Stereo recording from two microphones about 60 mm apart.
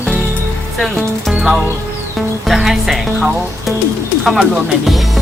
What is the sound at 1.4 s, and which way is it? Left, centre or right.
Speech, centre.